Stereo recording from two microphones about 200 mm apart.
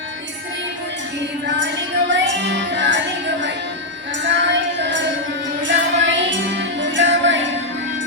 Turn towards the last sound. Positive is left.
turn(degrees=-65)  # may be behind; listen again after turning